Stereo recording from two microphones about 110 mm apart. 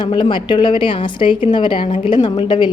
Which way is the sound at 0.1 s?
45° left (ahead or behind).